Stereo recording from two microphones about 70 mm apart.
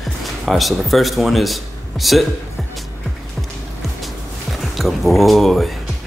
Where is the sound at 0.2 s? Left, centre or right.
Centre.